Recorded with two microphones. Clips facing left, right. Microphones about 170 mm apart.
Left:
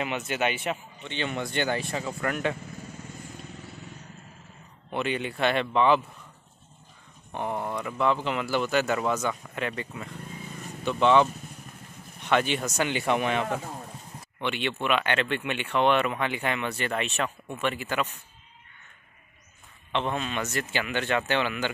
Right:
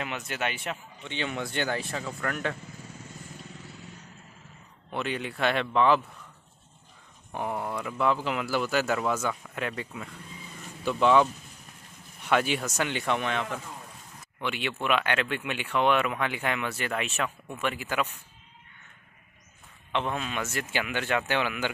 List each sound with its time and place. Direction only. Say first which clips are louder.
0.0 s speech: left 4 dB; centre (ahead or behind)
4.9 s speech: left 3 dB; centre (ahead or behind)
7.3 s speech: left 1 dB; 5° right (ahead or behind)
14.4 s speech: left 2 dB; 5° right (ahead or behind)
19.9 s speech: left 1 dB; 5° right (ahead or behind)